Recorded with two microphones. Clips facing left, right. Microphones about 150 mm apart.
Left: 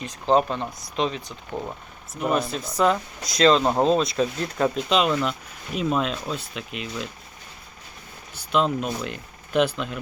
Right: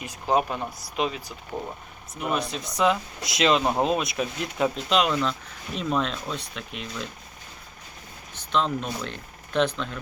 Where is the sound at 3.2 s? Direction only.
15° right (ahead or behind).